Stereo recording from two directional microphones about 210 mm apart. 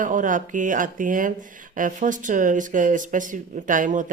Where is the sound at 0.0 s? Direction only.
40° right (ahead or behind).